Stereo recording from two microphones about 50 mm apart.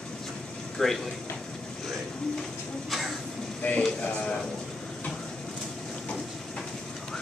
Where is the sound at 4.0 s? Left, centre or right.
Left.